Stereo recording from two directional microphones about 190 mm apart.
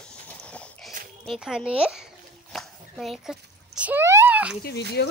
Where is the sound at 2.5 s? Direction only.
Centre (ahead or behind).